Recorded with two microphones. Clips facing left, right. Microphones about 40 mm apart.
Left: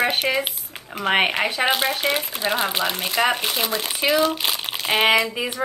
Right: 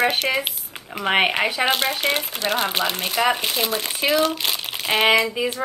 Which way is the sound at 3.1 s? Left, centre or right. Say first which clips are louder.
Even; centre.